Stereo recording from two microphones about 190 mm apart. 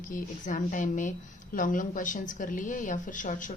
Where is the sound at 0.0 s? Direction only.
45° left (ahead or behind).